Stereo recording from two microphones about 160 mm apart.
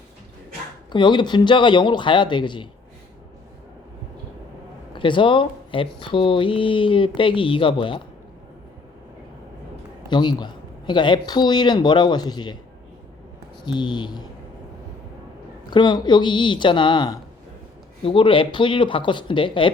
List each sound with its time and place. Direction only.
0.9 s speech: 30° left (ahead or behind)
4.9 s speech: 30° left (ahead or behind)
10.1 s speech: 30° left (ahead or behind)
13.7 s speech: 30° left (ahead or behind)
15.7 s speech: 30° left (ahead or behind)